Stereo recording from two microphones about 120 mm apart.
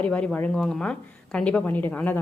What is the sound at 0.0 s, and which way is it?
A woman's voice, 10° left (ahead or behind).